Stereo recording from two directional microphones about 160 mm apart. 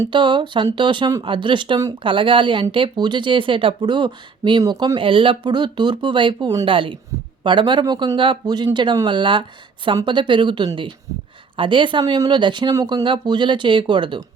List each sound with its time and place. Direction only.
0.1 s speech: 30° right (ahead or behind)